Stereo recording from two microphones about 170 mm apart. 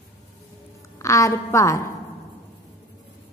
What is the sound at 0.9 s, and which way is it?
Speech, 20° left (ahead or behind).